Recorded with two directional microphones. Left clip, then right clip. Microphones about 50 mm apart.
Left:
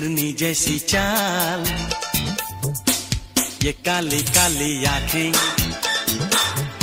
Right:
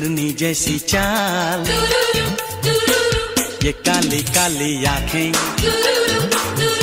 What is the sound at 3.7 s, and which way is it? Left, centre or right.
Music, centre.